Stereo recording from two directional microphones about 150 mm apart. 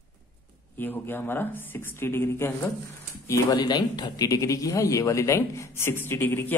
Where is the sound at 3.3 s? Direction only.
25° left (ahead or behind).